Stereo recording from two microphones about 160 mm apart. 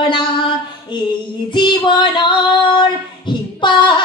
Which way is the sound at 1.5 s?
30° left (ahead or behind).